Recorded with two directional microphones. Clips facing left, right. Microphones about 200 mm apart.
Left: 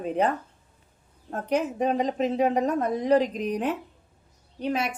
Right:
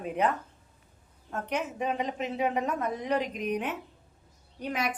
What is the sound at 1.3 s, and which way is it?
A woman's voice, 35° left (ahead or behind).